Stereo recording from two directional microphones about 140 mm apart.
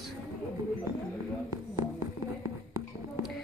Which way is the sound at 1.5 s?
20° right (ahead or behind).